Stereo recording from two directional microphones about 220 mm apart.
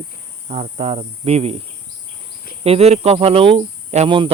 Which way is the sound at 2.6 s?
30° right (ahead or behind).